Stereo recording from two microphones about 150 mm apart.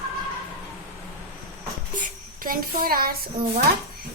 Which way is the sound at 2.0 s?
70° right (ahead or behind).